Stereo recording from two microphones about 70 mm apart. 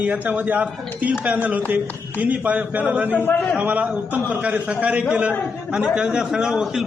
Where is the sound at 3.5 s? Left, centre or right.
Right.